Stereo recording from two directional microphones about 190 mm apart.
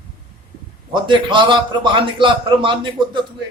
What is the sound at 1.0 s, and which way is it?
A man's voice, 25° right (ahead or behind).